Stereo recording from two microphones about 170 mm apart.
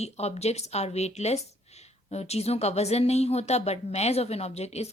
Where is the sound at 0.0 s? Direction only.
40° left (ahead or behind).